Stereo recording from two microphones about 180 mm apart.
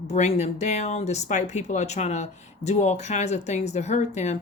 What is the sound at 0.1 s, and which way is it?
Speech, 40° left (ahead or behind).